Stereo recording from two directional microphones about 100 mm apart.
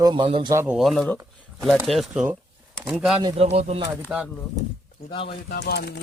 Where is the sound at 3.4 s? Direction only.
90° right.